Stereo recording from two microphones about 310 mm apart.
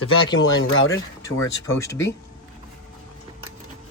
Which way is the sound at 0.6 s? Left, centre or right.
Left.